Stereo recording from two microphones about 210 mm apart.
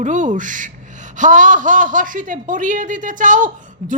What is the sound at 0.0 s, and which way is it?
Speech, 35° right (ahead or behind).